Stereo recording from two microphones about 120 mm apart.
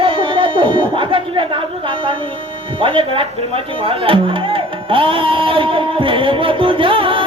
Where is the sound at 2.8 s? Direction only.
45° right (ahead or behind).